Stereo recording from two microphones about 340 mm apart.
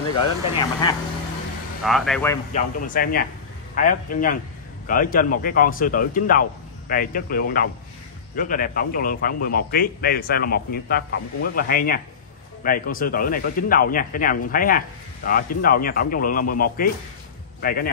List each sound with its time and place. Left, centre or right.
0.6 s speech: centre
1.9 s speech: centre
2.5 s speech: left